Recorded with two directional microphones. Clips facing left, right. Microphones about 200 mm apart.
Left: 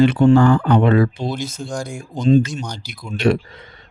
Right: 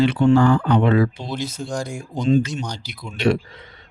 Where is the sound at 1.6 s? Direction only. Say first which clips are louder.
Even; centre (ahead or behind).